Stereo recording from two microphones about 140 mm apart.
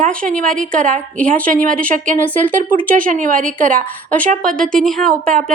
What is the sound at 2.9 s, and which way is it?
Speech, 70° right (ahead or behind).